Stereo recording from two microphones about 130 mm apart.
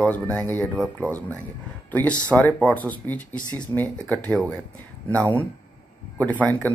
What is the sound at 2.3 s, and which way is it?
Speech, 10° left (ahead or behind).